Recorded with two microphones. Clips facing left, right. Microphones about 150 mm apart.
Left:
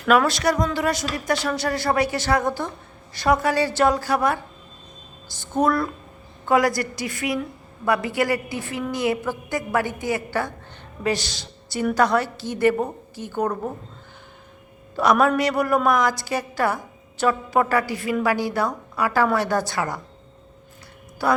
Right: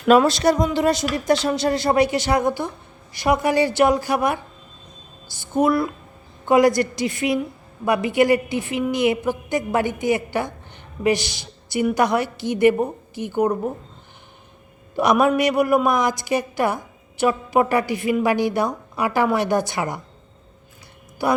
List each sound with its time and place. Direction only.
0.0 s a woman's voice: 25° right (ahead or behind)
5.4 s a woman's voice: 10° right (ahead or behind)
6.5 s a woman's voice: 20° right (ahead or behind)
14.9 s a woman's voice: 15° right (ahead or behind)
21.2 s a woman's voice: 15° right (ahead or behind)